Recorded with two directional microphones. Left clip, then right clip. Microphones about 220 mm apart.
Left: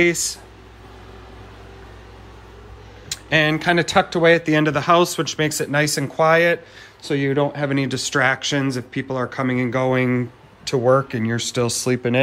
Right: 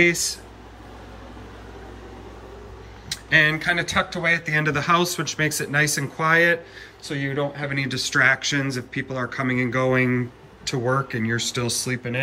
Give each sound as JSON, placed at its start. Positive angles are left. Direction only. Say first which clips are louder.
{"t": 0.0, "sound": "speech", "louder": "left 1 dB", "side_deg": 10}
{"t": 3.1, "sound": "speech", "louder": "even", "side_deg": 10}
{"t": 7.1, "sound": "speech", "louder": "left 6 dB", "side_deg": 25}